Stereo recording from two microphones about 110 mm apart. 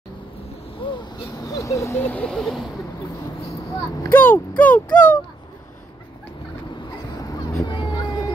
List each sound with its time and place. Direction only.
1.4 s speech: 30° left (ahead or behind); by 2.7 s 5° left (ahead or behind)
4.1 s speech: 15° left (ahead or behind)
7.2 s a sound: 35° left (ahead or behind)